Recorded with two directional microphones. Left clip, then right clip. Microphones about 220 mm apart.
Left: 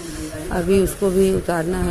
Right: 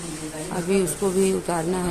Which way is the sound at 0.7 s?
10° left (ahead or behind).